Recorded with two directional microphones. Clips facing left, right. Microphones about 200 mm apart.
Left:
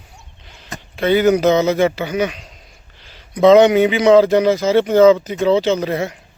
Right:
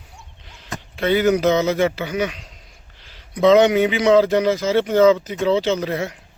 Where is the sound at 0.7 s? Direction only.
25° left (ahead or behind).